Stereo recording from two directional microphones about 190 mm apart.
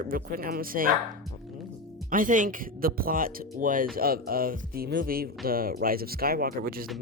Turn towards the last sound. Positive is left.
turn(degrees=-50)  # may be behind; listen again after turning